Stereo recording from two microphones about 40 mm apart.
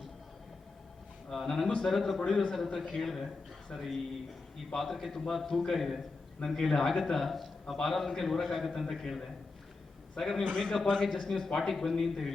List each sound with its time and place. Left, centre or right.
1.3 s a man's voice: centre
2.2 s a man's voice: centre
10.4 s a man's voice: left; by 12.3 s centre